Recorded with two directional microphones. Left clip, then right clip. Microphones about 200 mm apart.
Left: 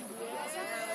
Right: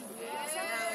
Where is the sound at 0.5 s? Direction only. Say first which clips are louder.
Right 2 dB; 35° right (ahead or behind).